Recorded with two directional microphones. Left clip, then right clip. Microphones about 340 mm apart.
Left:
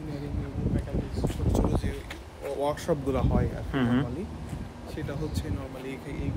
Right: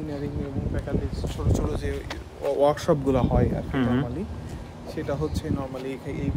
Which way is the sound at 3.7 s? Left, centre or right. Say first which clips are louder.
Even; centre.